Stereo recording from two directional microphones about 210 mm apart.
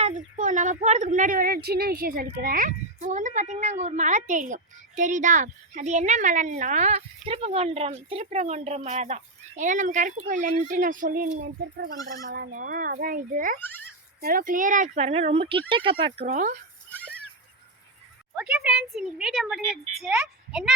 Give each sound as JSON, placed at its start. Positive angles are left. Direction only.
{"t": 0.0, "sound": "a woman's voice", "side_deg": -35}
{"t": 12.3, "sound": "a woman's voice", "side_deg": -45}
{"t": 13.6, "sound": "a child's voice", "side_deg": 10}
{"t": 14.2, "sound": "a woman's voice", "side_deg": -45}
{"t": 16.3, "sound": "a woman's voice", "side_deg": -40}
{"t": 16.9, "sound": "a sound", "side_deg": 5}
{"t": 18.3, "sound": "a woman's voice", "side_deg": -5}